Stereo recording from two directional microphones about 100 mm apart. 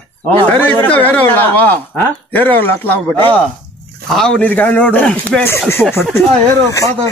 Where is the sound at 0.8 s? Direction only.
15° left (ahead or behind).